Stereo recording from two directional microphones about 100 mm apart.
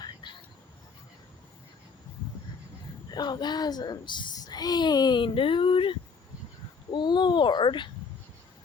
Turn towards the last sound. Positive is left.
turn(degrees=50)  # may be behind; listen again after turning